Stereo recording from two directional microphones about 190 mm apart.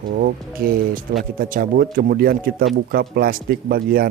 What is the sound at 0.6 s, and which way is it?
Speech, 50° right (ahead or behind).